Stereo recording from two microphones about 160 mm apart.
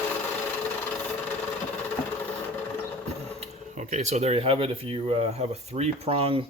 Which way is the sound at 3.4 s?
50° right (ahead or behind).